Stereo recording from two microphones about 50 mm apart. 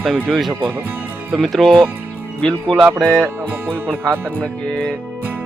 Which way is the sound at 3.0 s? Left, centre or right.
Centre.